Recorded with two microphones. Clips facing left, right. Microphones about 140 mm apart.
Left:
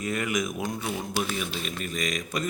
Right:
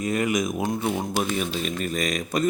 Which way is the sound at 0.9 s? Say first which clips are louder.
Right 5 dB; 55° right (ahead or behind).